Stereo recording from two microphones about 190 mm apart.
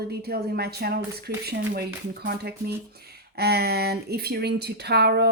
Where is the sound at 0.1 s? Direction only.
55° right (ahead or behind).